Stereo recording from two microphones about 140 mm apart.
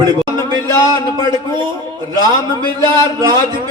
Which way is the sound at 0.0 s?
30° right (ahead or behind).